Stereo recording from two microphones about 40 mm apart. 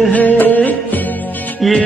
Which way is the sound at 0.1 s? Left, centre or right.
Left.